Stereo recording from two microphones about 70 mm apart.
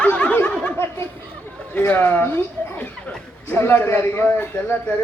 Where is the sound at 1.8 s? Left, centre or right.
Left.